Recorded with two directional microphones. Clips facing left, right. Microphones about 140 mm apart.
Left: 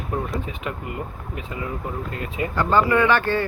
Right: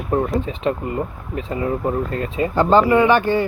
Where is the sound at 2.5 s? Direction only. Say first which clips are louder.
Right 5 dB; 20° right (ahead or behind).